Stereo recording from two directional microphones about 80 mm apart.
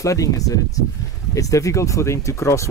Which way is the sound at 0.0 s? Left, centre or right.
Left.